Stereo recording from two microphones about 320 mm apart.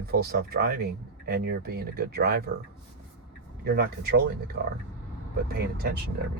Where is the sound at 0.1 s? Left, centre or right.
Right.